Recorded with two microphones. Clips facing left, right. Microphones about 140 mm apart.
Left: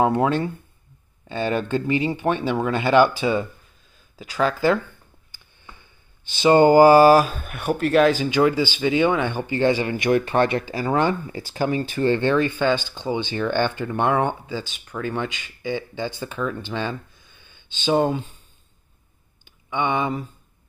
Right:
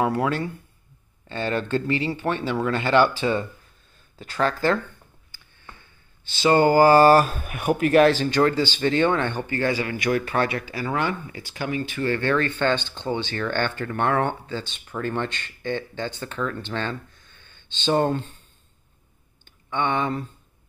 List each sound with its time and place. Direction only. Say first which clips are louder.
0.0 s speech: left 4 dB; 25° left (ahead or behind)
1.3 s speech: left 2 dB; 15° left (ahead or behind)
6.2 s speech: left 3 dB; 20° left (ahead or behind)
9.5 s speech: left 4 dB; 25° left (ahead or behind)
19.4 s a sound: left 1 dB; 10° left (ahead or behind)